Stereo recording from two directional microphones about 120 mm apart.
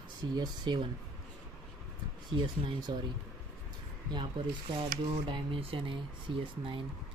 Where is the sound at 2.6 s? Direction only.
35° right (ahead or behind).